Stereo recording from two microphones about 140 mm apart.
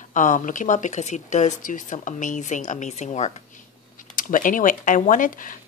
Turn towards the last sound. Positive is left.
turn(degrees=70)  # may be behind; listen again after turning